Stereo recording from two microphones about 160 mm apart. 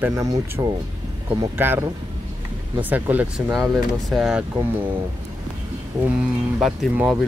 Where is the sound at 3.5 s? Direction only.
Centre (ahead or behind).